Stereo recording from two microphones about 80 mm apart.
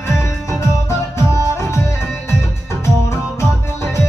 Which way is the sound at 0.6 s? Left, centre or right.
Left.